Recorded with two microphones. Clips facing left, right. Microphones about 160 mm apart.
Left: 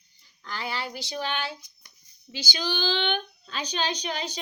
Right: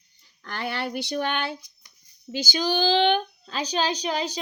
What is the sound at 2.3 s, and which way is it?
Speech, 45° right (ahead or behind).